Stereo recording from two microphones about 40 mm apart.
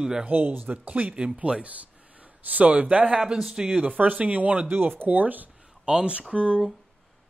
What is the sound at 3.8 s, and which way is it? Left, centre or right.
Speech, right.